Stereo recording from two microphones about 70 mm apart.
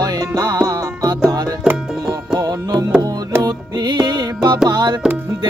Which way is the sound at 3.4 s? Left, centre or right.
Right.